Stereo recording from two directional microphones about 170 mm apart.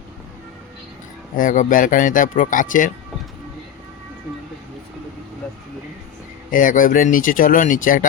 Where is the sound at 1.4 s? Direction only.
50° left (ahead or behind).